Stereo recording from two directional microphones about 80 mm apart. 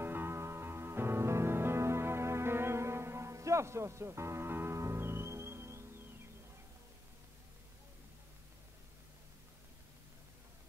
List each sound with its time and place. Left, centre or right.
0.0 s music: right